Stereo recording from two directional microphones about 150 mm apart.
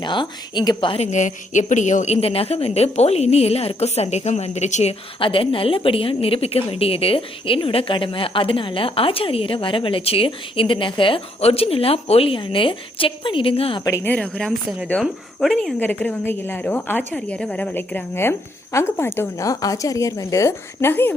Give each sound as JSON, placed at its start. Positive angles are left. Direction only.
{"t": 0.0, "sound": "a woman's voice", "side_deg": 30}
{"t": 1.0, "sound": "a woman's voice", "side_deg": 55}
{"t": 13.8, "sound": "a woman's voice", "side_deg": 15}